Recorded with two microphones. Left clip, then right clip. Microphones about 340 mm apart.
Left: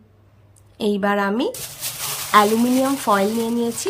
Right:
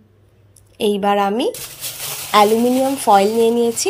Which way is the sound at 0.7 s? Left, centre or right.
Centre.